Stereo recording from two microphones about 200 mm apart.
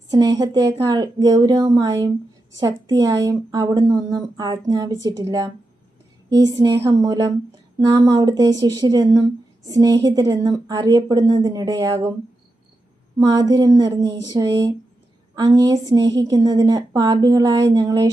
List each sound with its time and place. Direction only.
0.1 s speech: 20° right (ahead or behind)
13.1 s speech: 20° right (ahead or behind)